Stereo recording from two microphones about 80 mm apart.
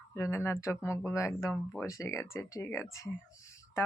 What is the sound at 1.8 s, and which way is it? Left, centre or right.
Speech, left.